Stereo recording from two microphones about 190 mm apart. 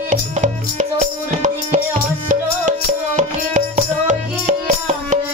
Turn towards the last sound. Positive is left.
turn(degrees=-40)  # may be behind; listen again after turning